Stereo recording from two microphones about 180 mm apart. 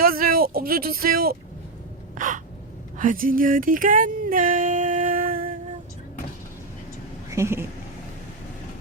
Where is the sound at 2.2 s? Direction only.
45° right (ahead or behind).